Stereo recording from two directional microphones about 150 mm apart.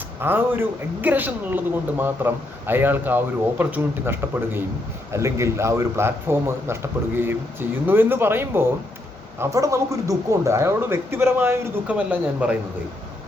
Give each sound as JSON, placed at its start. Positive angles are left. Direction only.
{"t": 0.2, "sound": "speech", "side_deg": -15}